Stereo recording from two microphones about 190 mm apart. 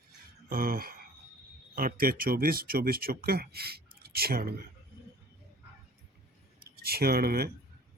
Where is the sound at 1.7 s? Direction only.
50° right (ahead or behind).